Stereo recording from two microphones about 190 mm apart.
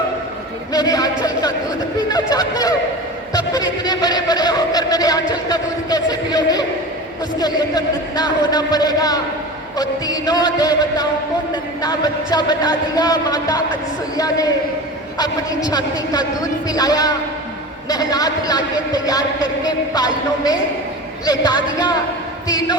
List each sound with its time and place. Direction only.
0.7 s a sound: 20° left (ahead or behind)
2.0 s a man's voice: 20° left (ahead or behind)
19.6 s a man's voice: 20° left (ahead or behind)